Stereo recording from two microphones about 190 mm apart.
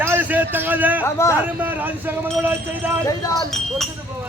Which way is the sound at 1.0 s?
15° left (ahead or behind).